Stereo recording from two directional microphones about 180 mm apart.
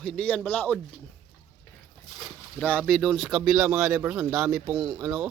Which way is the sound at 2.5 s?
10° left (ahead or behind).